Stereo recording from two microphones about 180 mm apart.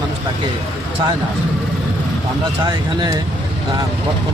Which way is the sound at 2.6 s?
20° right (ahead or behind).